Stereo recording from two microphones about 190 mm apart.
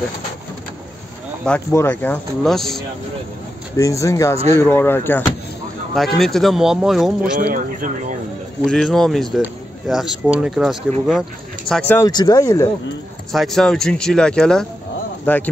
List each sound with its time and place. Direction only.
1.4 s speech: 10° left (ahead or behind)
3.7 s speech: 15° left (ahead or behind)
5.9 s speech: centre (ahead or behind)
7.3 s speech: 45° right (ahead or behind)
8.6 s speech: centre (ahead or behind)
11.9 s speech: 20° left (ahead or behind)
13.3 s speech: centre (ahead or behind)